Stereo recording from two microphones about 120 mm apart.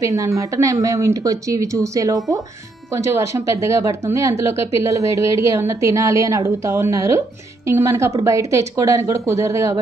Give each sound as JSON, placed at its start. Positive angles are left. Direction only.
{"t": 0.0, "sound": "speech", "side_deg": -30}